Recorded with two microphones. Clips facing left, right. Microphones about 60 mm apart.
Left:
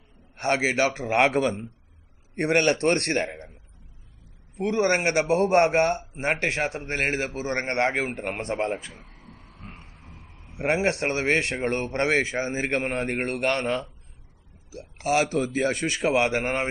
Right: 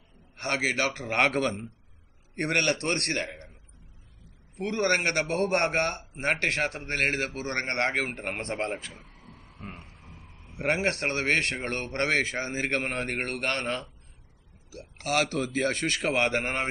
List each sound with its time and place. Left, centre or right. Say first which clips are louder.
0.4 s a man's voice: left 5 dB; left; by 1.7 s centre
2.3 s a man's voice: left 5 dB; centre
2.6 s a man's voice: left 6 dB; left
4.6 s a man's voice: left 3 dB; centre
8.3 s speech: left 4 dB; centre
10.6 s a man's voice: left 3 dB; centre